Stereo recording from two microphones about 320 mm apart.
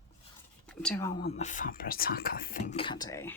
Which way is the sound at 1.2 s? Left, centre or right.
Centre.